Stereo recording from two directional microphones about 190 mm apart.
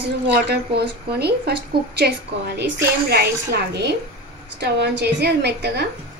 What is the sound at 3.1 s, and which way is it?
A woman's voice, 60° right (ahead or behind).